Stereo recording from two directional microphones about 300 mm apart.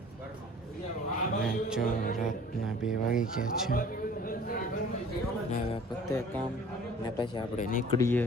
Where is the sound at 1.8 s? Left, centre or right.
Left.